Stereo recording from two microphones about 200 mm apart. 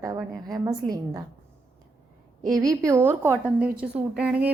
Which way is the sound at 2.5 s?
15° right (ahead or behind).